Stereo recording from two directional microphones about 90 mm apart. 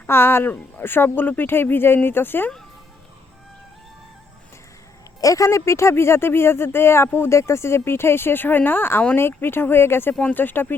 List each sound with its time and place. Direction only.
0.1 s speech: 25° left (ahead or behind)
5.2 s speech: 40° left (ahead or behind); by 10.8 s 20° left (ahead or behind)